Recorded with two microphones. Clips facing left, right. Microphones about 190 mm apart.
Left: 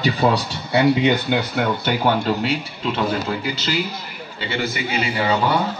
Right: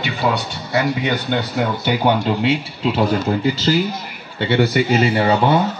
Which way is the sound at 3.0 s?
40° right (ahead or behind).